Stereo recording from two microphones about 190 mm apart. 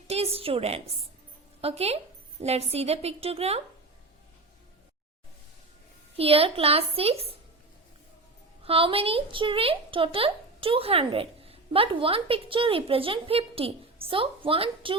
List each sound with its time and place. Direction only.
0.3 s a woman's voice: 30° right (ahead or behind)
6.1 s a woman's voice: 30° right (ahead or behind)
8.6 s speech: 30° right (ahead or behind)